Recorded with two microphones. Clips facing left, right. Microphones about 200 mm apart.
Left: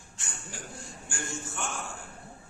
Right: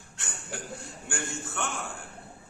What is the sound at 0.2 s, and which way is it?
Chuckle, 65° right (ahead or behind).